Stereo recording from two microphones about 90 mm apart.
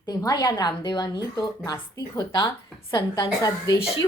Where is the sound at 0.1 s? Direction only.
50° left (ahead or behind).